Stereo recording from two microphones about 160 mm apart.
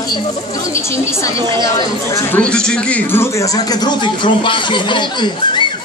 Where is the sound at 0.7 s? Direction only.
20° left (ahead or behind).